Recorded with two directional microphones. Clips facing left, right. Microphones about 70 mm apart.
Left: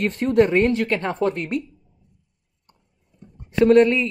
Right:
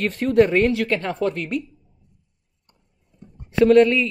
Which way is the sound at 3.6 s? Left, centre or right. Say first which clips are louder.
Even; left.